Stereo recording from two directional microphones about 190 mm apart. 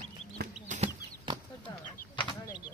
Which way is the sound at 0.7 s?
40° right (ahead or behind).